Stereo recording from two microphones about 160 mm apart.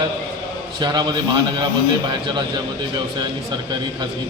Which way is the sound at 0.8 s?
25° right (ahead or behind).